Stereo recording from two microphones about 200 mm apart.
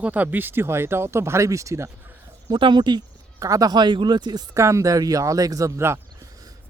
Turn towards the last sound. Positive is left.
turn(degrees=-15)  # may be behind; listen again after turning